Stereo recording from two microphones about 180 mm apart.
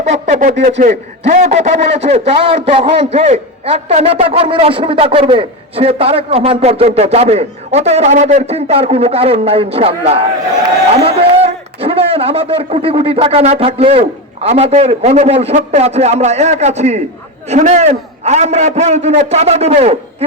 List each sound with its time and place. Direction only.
0.0 s a man's voice: 40° right (ahead or behind)